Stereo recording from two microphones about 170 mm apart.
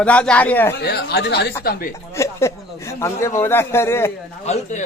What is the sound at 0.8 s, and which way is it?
Speech, 75° left (ahead or behind).